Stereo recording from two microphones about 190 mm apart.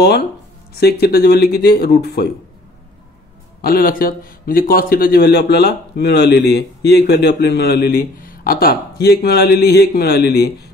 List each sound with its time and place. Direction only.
0.7 s a man's voice: 60° left (ahead or behind)
3.6 s a man's voice: 50° left (ahead or behind)